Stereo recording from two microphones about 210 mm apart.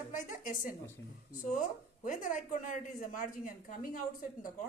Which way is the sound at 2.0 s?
40° left (ahead or behind).